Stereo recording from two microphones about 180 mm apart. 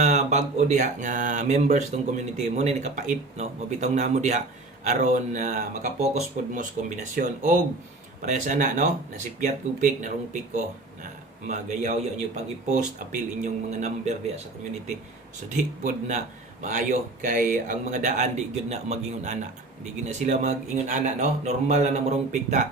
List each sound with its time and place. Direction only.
0.0 s a man's voice: 40° right (ahead or behind)
15.4 s speech: 45° right (ahead or behind)